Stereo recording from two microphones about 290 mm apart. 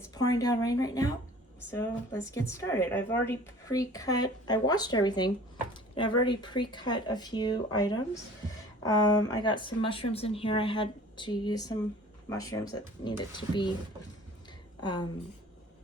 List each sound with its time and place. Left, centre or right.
0.1 s speech: centre
2.5 s speech: centre
14.8 s speech: centre